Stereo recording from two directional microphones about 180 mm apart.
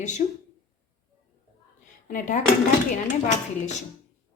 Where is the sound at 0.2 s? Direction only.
40° left (ahead or behind).